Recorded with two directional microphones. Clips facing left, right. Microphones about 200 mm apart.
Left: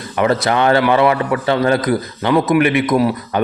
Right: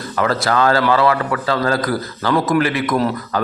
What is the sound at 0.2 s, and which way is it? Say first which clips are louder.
A man's voice: left 2 dB; 20° left (ahead or behind).